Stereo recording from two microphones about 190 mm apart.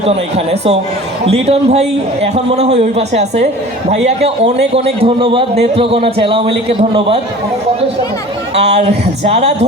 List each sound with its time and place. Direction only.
0.0 s a man's voice: 35° right (ahead or behind)
8.5 s a man's voice: 35° right (ahead or behind)